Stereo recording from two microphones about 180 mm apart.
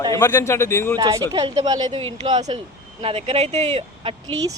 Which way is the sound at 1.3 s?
20° right (ahead or behind).